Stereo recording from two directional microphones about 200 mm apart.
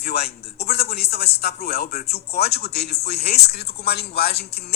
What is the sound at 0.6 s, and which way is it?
Speech, 50° left (ahead or behind).